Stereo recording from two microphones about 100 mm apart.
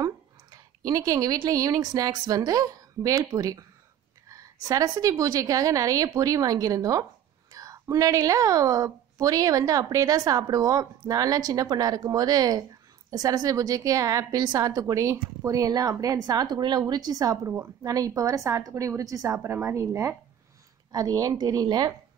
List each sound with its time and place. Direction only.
0.0 s a woman's voice: 40° right (ahead or behind)
20.9 s a woman's voice: 40° right (ahead or behind)